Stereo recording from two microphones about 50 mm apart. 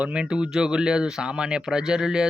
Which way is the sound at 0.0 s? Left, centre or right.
Centre.